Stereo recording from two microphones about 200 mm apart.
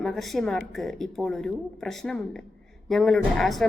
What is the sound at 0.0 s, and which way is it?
A woman's voice, centre (ahead or behind).